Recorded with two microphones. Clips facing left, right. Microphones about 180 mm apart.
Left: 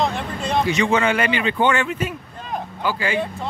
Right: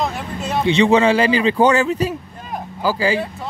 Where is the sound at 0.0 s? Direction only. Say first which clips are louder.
Left 1 dB; 5° right (ahead or behind).